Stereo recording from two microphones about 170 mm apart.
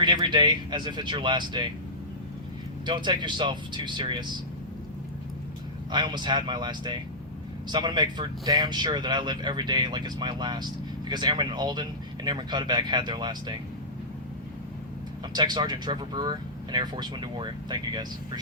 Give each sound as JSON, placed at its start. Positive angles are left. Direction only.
{"t": 0.0, "sound": "speech", "side_deg": -25}
{"t": 2.8, "sound": "speech", "side_deg": -25}
{"t": 5.9, "sound": "speech", "side_deg": -25}
{"t": 15.3, "sound": "speech", "side_deg": -25}